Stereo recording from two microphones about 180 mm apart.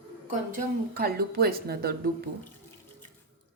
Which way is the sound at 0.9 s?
60° right (ahead or behind).